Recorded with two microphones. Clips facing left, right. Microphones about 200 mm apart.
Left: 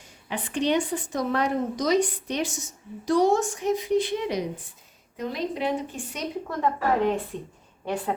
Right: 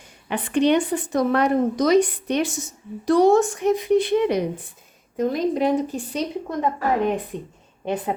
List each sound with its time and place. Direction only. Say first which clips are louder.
0.3 s a woman's voice: right 6 dB; 60° right (ahead or behind)
5.1 s a woman's voice: right 8 dB; 45° right (ahead or behind)
6.5 s a woman's voice: right 1 dB; 15° right (ahead or behind)